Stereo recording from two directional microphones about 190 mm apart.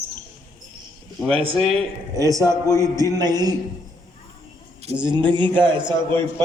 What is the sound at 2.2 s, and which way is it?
A man's voice, 15° right (ahead or behind).